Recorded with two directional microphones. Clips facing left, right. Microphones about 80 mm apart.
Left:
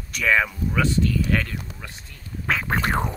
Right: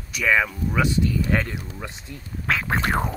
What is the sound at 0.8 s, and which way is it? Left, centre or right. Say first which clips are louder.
Speech: even; centre.